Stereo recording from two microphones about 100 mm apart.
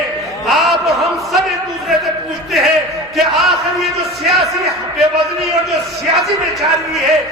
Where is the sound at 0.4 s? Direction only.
Centre (ahead or behind).